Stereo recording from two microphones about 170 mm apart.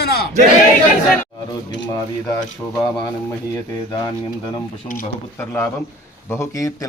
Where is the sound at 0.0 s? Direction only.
70° left (ahead or behind).